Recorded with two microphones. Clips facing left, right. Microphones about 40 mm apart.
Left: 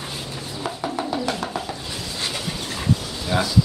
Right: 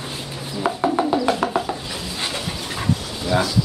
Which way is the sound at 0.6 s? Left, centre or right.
Right.